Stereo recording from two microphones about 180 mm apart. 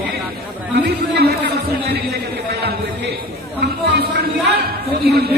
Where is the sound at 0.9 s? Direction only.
65° right (ahead or behind).